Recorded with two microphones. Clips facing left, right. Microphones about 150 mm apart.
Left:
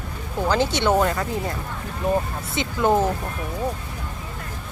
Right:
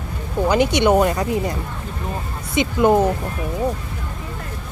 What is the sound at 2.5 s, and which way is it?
Speech, 15° right (ahead or behind).